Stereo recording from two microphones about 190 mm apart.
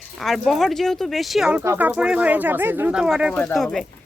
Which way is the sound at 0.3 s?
Centre (ahead or behind).